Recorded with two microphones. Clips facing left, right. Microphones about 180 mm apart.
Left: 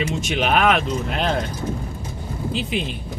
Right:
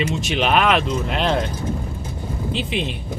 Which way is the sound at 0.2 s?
50° left (ahead or behind).